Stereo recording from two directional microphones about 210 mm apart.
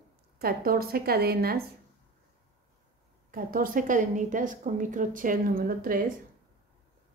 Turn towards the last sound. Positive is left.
turn(degrees=-45)  # may be behind; listen again after turning